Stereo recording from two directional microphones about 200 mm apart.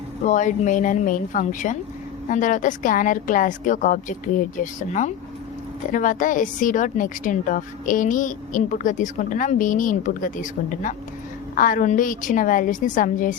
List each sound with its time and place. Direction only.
0.3 s a woman's voice: 40° left (ahead or behind)